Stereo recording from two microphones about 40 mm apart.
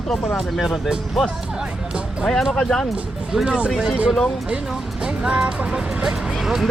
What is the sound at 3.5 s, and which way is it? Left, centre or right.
Speech, right.